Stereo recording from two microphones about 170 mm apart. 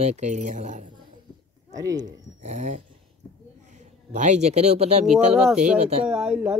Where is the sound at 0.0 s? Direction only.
40° right (ahead or behind).